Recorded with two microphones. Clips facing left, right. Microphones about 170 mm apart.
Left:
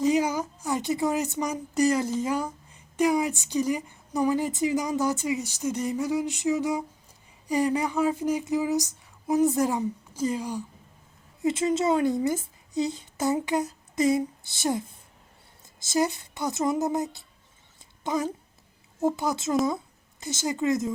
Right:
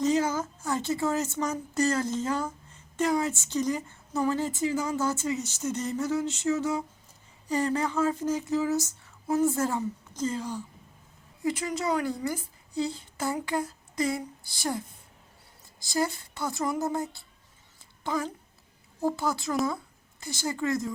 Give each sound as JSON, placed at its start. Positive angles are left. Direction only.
{"t": 0.0, "sound": "speech", "side_deg": 15}
{"t": 11.4, "sound": "a woman's voice", "side_deg": 25}